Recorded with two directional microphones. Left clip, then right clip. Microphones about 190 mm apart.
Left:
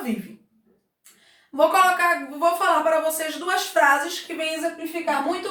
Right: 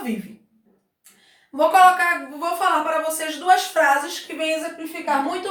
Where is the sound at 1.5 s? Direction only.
Centre (ahead or behind).